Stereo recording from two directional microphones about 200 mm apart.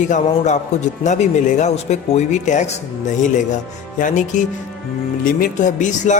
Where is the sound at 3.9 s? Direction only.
40° left (ahead or behind).